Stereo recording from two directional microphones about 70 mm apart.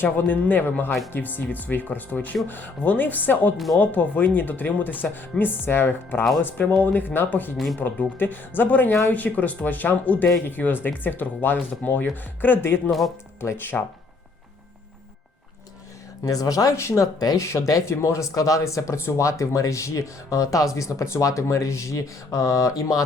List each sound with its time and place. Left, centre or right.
0.0 s speech: left
7.5 s speech: centre
7.8 s speech: left
16.2 s speech: left
17.2 s speech: left
17.4 s speech: left